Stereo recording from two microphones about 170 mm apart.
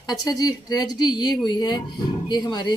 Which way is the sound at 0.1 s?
20° left (ahead or behind).